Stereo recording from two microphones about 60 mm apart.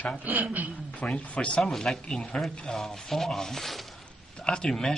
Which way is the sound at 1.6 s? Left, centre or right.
Centre.